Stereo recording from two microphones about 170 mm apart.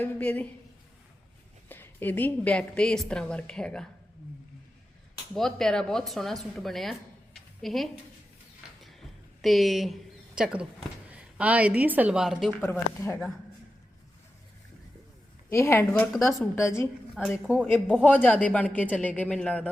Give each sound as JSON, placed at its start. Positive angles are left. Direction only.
{"t": 0.0, "sound": "a woman's voice", "side_deg": 10}
{"t": 1.7, "sound": "a woman's voice", "side_deg": 10}
{"t": 5.3, "sound": "speech", "side_deg": 0}
{"t": 7.3, "sound": "a sound", "side_deg": 0}
{"t": 11.8, "sound": "speech", "side_deg": -10}
{"t": 12.6, "sound": "a woman's voice", "side_deg": 15}
{"t": 15.4, "sound": "a woman's voice", "side_deg": 15}
{"t": 17.4, "sound": "speech", "side_deg": -5}
{"t": 17.8, "sound": "a woman's voice", "side_deg": 5}